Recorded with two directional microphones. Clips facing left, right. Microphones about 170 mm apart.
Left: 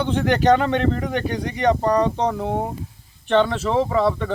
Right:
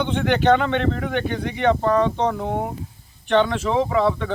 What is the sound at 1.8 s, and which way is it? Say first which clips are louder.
Speech: even; 35° left (ahead or behind).